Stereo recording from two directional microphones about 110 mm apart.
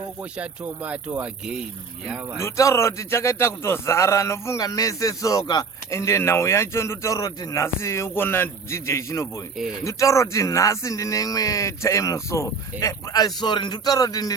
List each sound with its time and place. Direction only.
0.2 s speech: 10° right (ahead or behind)
2.4 s a man's voice: 25° left (ahead or behind)
5.9 s a man's voice: 25° left (ahead or behind)